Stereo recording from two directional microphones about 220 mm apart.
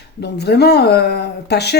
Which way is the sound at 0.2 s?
50° left (ahead or behind).